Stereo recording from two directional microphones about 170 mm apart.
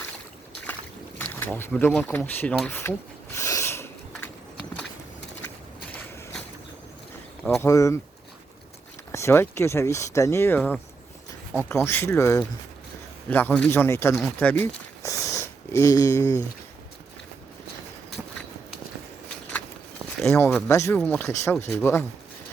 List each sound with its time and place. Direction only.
1.2 s boat: 10° left (ahead or behind)
2.0 s speech: 10° left (ahead or behind)
3.3 s a sound: 15° left (ahead or behind)
7.4 s speech: 10° left (ahead or behind)
9.1 s speech: 15° left (ahead or behind)
15.0 s a sound: 15° left (ahead or behind)
20.2 s speech: 10° left (ahead or behind)